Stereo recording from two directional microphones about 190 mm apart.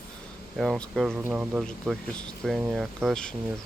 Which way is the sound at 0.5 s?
Centre (ahead or behind).